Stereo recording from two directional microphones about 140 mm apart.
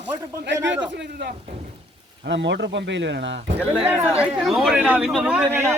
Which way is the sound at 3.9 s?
10° right (ahead or behind).